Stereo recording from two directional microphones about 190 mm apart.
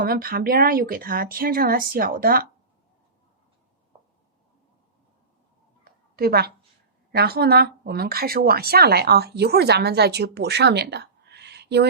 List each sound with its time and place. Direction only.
0.0 s speech: 50° right (ahead or behind)
5.8 s a sound: 55° right (ahead or behind)
7.1 s speech: 55° right (ahead or behind)